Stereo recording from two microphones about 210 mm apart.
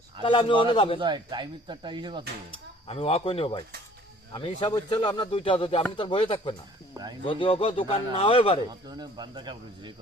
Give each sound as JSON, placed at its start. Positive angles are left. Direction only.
{"t": 0.2, "sound": "speech", "side_deg": 25}
{"t": 0.9, "sound": "speech", "side_deg": -20}
{"t": 2.8, "sound": "speech", "side_deg": 25}
{"t": 6.9, "sound": "speech", "side_deg": -20}
{"t": 7.3, "sound": "speech", "side_deg": 25}
{"t": 9.0, "sound": "speech", "side_deg": -20}